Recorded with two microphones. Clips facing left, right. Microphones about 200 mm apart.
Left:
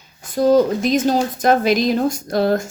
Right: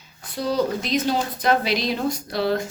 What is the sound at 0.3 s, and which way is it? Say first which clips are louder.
A woman's voice: left 9 dB; 45° left (ahead or behind).